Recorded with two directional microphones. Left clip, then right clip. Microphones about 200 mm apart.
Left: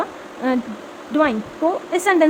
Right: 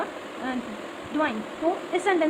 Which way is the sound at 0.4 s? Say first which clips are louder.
Left 11 dB; 45° left (ahead or behind).